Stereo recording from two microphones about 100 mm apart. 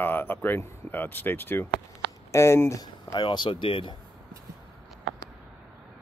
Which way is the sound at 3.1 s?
50° left (ahead or behind).